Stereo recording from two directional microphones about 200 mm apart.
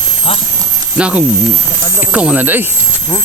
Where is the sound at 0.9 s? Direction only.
5° right (ahead or behind).